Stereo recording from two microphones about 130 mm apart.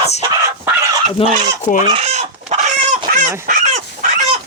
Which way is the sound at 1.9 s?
60° right (ahead or behind).